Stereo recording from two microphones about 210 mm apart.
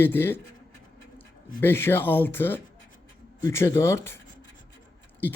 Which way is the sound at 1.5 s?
10° left (ahead or behind).